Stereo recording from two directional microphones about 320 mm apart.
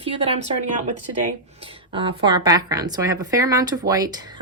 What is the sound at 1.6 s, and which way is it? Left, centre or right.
A woman's voice, centre.